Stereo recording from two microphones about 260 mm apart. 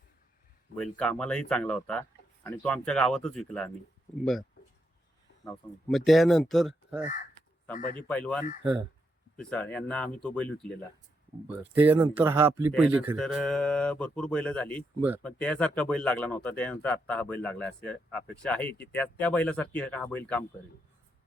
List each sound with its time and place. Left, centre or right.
0.8 s speech: centre
5.9 s speech: centre
7.7 s a man's voice: left
7.9 s speech: centre
9.4 s speech: centre
11.7 s speech: centre